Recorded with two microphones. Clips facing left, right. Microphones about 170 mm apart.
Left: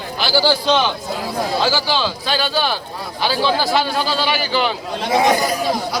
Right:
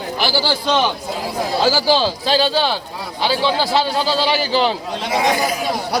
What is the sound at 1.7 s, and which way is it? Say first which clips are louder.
A man's voice: right 4 dB; 40° right (ahead or behind).